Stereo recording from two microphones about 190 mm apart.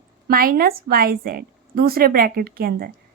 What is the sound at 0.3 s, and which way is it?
Speech, 50° right (ahead or behind).